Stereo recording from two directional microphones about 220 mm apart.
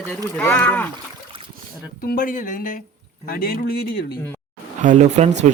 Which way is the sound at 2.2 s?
40° left (ahead or behind).